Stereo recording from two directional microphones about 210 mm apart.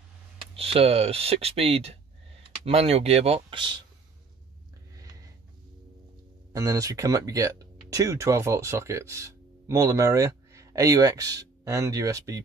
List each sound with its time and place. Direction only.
0.6 s speech: 25° right (ahead or behind)
6.5 s speech: 15° right (ahead or behind)